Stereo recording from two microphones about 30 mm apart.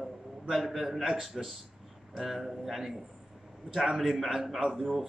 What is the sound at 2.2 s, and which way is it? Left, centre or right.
A man's voice, centre.